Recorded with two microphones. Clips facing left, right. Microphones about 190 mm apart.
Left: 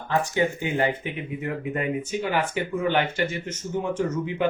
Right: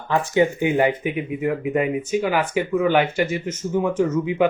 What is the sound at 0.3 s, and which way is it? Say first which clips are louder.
Speech: right 9 dB; 15° right (ahead or behind).